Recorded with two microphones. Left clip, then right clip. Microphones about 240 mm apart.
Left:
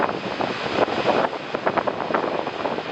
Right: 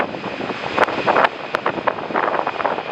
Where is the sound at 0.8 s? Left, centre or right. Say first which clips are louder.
Right 5 dB; centre.